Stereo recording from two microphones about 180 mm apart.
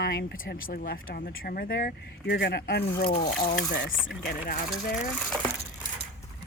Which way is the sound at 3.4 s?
70° left (ahead or behind).